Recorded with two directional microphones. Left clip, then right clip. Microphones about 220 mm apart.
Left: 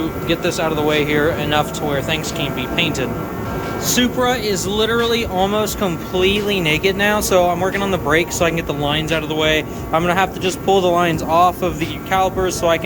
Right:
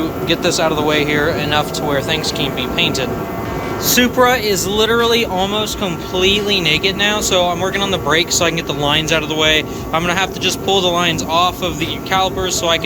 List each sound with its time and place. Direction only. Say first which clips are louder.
0.3 s speech: right 4 dB; 10° left (ahead or behind)